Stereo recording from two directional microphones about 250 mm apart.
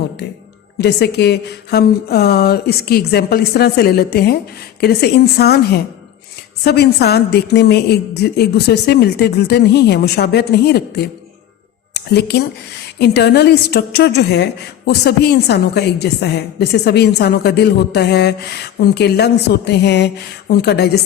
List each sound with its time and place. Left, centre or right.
0.8 s a woman's voice: left